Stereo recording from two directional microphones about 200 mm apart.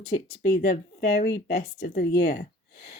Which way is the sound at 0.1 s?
55° left (ahead or behind).